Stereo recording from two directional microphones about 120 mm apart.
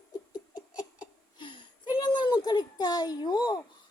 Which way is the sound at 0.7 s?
10° right (ahead or behind).